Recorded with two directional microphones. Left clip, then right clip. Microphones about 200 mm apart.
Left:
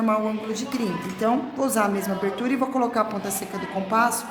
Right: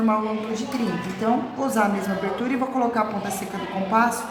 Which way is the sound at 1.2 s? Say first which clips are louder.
Left 1 dB; 45° left (ahead or behind).